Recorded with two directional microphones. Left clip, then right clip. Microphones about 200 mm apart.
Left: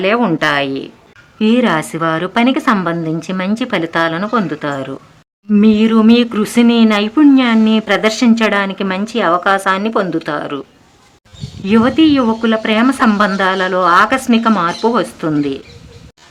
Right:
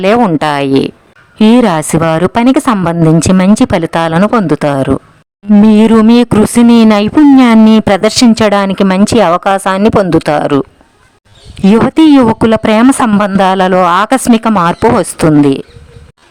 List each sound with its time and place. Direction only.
0.3 s speech: 50° right (ahead or behind)
5.6 s a sound: 55° right (ahead or behind)
6.1 s speech: 55° right (ahead or behind)
11.6 s speech: 50° right (ahead or behind)